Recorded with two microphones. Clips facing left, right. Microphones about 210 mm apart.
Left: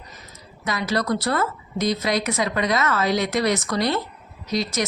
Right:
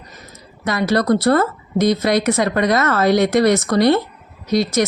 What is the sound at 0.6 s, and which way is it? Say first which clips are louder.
A woman's voice: right 7 dB; 65° right (ahead or behind).